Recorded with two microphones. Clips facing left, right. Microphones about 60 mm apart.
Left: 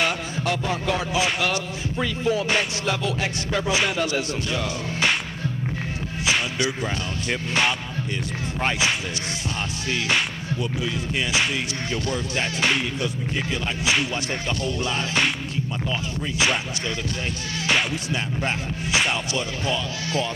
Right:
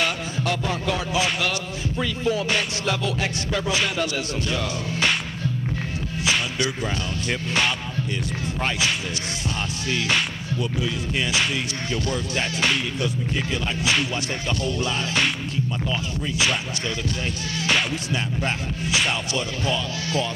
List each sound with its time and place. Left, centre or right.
0.0 s a sound: centre
1.1 s music: centre
6.2 s music: centre
14.6 s music: left
17.6 s music: centre